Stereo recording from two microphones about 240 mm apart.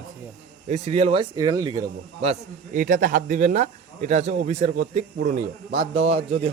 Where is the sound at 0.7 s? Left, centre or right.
Right.